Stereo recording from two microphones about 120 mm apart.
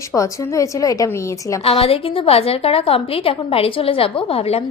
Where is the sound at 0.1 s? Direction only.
25° left (ahead or behind).